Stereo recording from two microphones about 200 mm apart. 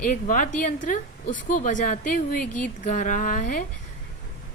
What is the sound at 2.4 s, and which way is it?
Speech, 5° left (ahead or behind).